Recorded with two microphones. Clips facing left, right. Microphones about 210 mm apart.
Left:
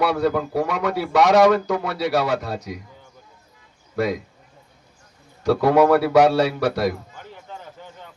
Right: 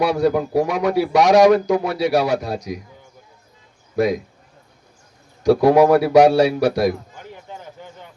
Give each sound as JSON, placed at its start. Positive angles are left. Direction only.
{"t": 0.0, "sound": "a man's voice", "side_deg": -15}
{"t": 3.9, "sound": "a man's voice", "side_deg": -15}
{"t": 5.4, "sound": "a sound", "side_deg": -15}